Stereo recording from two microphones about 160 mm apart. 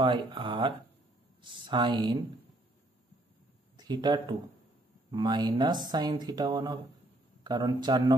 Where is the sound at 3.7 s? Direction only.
25° right (ahead or behind).